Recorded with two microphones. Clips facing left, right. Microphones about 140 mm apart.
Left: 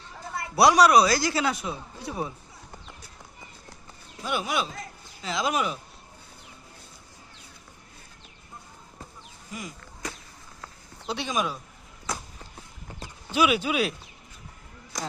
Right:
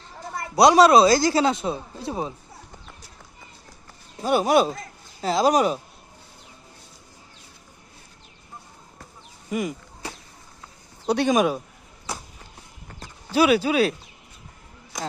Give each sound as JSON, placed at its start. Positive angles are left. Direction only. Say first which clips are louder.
{"t": 0.5, "sound": "speech", "louder": "right 4 dB", "side_deg": -25}
{"t": 4.2, "sound": "speech", "louder": "right 10 dB", "side_deg": -40}
{"t": 9.5, "sound": "speech", "louder": "right 12 dB", "side_deg": -65}
{"t": 11.0, "sound": "speech", "louder": "right 9 dB", "side_deg": -50}
{"t": 13.3, "sound": "speech", "louder": "right 5 dB", "side_deg": -35}